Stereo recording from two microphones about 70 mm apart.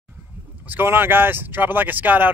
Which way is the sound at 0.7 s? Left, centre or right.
Right.